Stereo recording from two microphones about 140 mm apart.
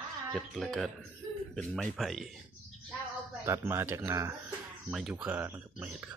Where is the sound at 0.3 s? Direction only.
5° left (ahead or behind).